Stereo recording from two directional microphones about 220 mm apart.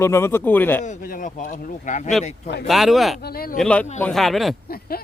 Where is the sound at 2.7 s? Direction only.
Centre (ahead or behind).